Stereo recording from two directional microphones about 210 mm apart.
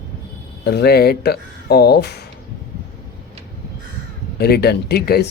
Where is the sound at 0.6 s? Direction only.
50° left (ahead or behind).